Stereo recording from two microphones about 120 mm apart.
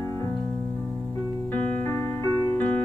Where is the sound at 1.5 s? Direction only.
15° left (ahead or behind).